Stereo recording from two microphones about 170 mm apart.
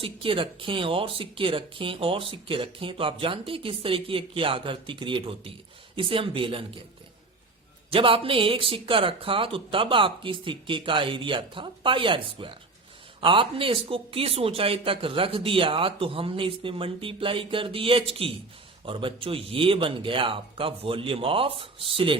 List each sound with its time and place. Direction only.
0.0 s speech: 30° right (ahead or behind)
7.9 s speech: 30° right (ahead or behind)